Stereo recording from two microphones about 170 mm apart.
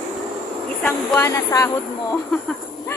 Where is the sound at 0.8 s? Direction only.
5° left (ahead or behind).